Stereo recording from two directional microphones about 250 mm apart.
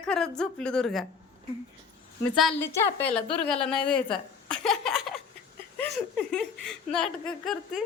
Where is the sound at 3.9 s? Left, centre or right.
Centre.